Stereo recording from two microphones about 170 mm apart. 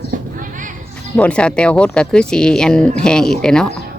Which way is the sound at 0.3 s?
50° right (ahead or behind).